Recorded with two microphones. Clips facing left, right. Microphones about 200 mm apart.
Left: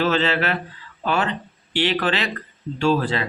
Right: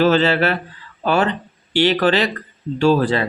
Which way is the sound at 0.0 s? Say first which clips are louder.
Right 5 dB; 40° right (ahead or behind).